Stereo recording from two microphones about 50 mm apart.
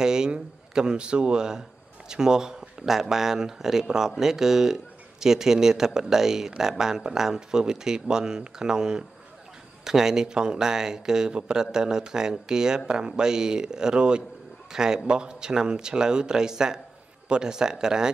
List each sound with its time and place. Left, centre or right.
0.0 s a man's voice: centre